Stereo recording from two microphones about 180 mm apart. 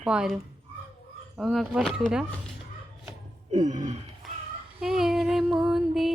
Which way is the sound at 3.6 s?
40° right (ahead or behind).